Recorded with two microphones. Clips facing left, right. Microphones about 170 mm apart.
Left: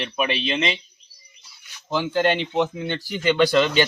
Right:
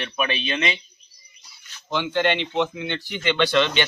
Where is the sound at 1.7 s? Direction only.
10° left (ahead or behind).